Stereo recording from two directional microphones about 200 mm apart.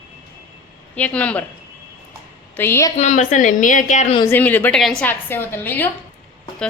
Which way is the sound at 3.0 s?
35° left (ahead or behind).